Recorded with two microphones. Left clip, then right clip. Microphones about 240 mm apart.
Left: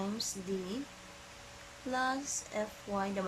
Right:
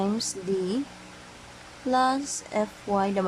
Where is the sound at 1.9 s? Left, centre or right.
Right.